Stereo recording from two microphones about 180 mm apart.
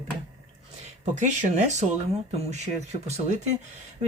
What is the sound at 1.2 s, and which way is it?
Speech, 40° right (ahead or behind).